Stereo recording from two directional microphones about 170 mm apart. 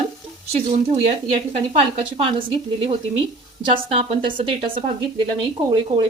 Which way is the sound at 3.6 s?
35° right (ahead or behind).